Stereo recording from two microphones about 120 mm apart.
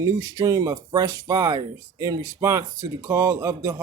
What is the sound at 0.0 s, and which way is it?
Speech, 30° right (ahead or behind).